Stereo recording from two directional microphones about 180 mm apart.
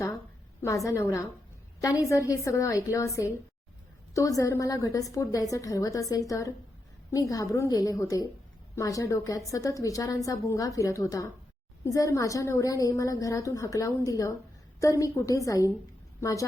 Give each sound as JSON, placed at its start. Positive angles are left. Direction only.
{"t": 0.6, "sound": "a woman's voice", "side_deg": 15}